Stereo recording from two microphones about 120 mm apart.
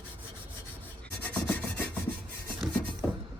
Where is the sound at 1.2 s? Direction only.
10° left (ahead or behind).